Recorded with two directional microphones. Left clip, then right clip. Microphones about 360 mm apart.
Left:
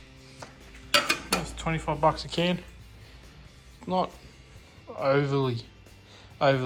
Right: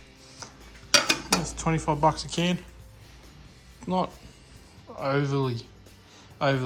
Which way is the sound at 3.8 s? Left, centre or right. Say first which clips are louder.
Even; centre.